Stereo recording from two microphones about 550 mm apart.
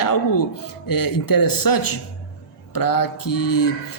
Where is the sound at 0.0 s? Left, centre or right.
Left.